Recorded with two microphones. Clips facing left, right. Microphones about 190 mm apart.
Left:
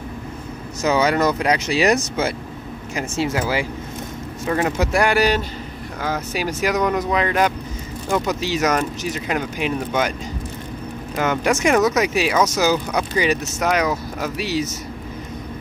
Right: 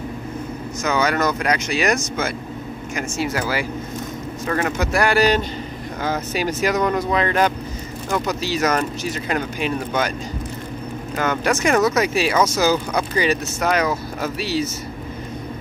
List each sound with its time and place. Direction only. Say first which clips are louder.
0.8 s speech: left 3 dB; 30° left (ahead or behind); by 7.5 s 10° left (ahead or behind)
9.3 s speech: even; 15° left (ahead or behind)
11.1 s speech: left 1 dB; 15° left (ahead or behind)